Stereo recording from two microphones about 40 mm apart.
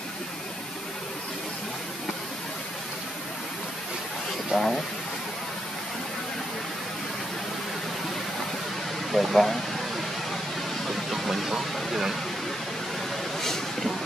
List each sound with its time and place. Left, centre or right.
4.5 s speech: centre
9.1 s speech: centre
10.9 s vehicle: centre
13.4 s vehicle: centre